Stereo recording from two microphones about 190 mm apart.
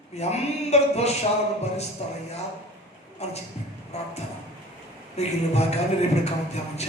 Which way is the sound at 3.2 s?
35° left (ahead or behind).